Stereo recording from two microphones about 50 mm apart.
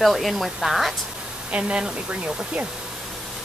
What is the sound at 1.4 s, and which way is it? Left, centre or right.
Speech, right.